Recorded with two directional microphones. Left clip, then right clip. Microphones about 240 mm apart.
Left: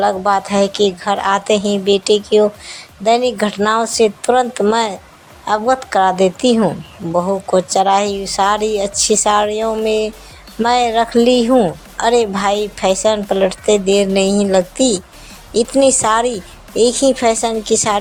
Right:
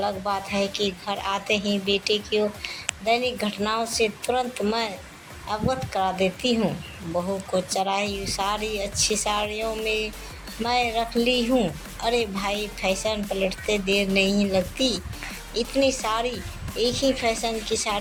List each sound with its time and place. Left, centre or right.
0.0 s a woman's voice: left